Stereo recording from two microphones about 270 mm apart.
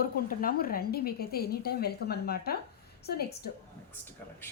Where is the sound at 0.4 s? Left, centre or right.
Left.